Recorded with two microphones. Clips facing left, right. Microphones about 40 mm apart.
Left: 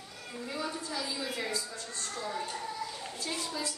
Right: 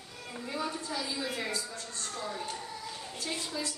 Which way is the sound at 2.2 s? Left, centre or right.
Centre.